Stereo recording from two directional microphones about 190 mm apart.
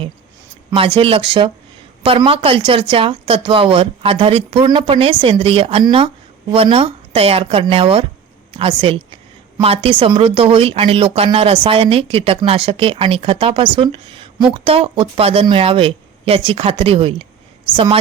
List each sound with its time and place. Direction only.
0.7 s speech: 30° right (ahead or behind)